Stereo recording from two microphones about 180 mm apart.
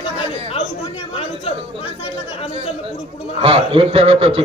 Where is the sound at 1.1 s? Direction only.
35° left (ahead or behind).